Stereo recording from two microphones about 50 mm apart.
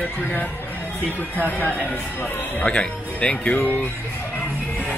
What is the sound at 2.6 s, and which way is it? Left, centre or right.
Speech, left.